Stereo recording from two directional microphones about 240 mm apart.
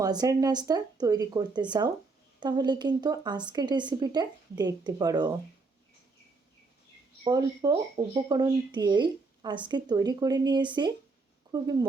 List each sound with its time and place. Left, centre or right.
0.0 s speech: centre
7.3 s speech: centre